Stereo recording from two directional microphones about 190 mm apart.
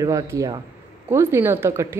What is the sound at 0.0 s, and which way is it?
Speech, 15° right (ahead or behind).